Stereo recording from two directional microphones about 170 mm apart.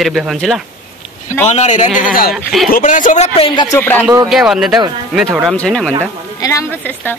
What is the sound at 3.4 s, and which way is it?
Speech, 30° left (ahead or behind).